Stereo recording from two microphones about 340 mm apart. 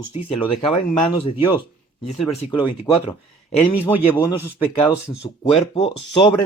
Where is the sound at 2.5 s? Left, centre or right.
Centre.